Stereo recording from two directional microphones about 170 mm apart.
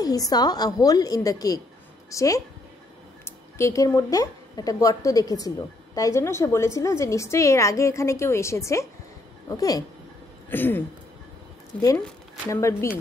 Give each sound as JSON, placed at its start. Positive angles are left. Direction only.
{"t": 0.0, "sound": "a woman's voice", "side_deg": 20}
{"t": 12.4, "sound": "a woman's voice", "side_deg": 20}